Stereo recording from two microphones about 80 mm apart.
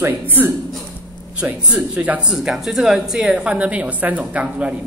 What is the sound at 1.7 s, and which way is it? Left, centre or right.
Speech, centre.